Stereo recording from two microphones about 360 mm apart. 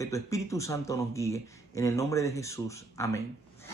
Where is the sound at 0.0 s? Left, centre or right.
Centre.